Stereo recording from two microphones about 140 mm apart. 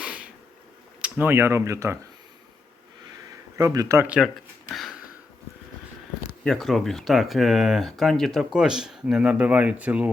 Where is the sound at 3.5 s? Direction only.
25° right (ahead or behind).